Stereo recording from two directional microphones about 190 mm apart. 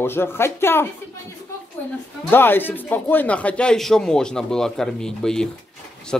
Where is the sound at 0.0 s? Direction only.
10° left (ahead or behind).